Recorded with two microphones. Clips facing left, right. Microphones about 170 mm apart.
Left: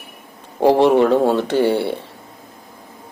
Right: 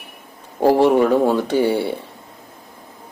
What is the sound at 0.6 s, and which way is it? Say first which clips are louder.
Speech: left 1 dB; 15° left (ahead or behind).